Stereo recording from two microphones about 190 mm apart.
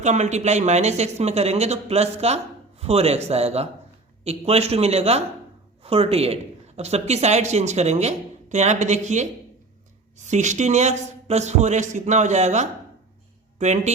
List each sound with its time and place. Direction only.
0.0 s speech: 35° right (ahead or behind)